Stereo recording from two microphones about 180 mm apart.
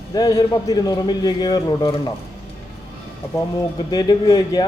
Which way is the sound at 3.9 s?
20° left (ahead or behind).